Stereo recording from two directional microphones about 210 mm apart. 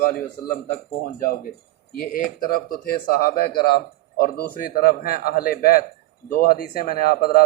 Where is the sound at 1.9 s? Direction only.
45° left (ahead or behind).